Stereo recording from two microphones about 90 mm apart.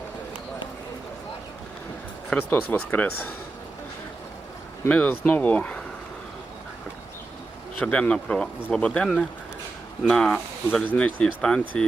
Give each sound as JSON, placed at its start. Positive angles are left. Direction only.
{"t": 2.3, "sound": "speech", "side_deg": 20}
{"t": 4.9, "sound": "speech", "side_deg": 15}
{"t": 7.8, "sound": "speech", "side_deg": 15}